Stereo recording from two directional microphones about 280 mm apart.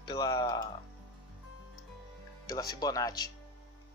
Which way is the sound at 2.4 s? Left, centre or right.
Centre.